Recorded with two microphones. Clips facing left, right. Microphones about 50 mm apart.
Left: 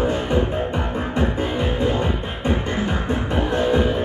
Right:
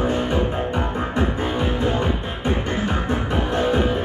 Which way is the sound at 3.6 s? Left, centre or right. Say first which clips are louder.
Left 1 dB; right.